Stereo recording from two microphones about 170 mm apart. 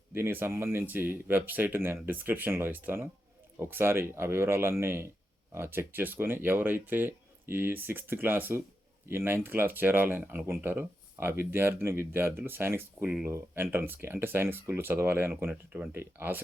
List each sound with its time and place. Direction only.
0.1 s speech: 10° right (ahead or behind)